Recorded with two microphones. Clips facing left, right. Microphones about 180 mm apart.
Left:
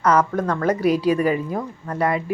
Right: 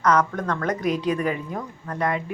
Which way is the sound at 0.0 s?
10° left (ahead or behind).